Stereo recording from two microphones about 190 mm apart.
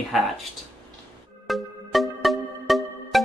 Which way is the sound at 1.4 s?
Centre (ahead or behind).